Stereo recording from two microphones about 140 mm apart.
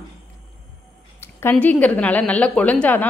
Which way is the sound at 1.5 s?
10° left (ahead or behind).